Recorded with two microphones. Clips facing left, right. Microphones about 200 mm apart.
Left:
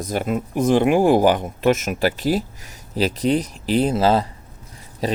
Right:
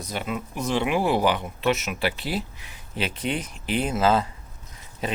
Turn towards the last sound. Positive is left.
turn(degrees=35)  # may be behind; listen again after turning